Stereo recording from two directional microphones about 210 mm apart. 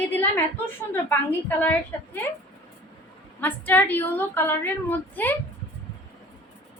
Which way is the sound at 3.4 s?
10° left (ahead or behind).